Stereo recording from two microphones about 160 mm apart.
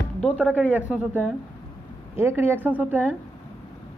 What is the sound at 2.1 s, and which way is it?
Speech, 15° right (ahead or behind).